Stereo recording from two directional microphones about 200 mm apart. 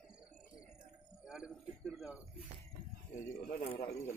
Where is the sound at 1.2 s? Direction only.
5° right (ahead or behind).